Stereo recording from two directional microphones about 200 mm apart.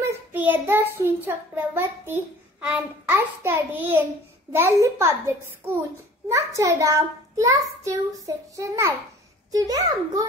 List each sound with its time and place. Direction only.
0.0 s child singing: 10° right (ahead or behind)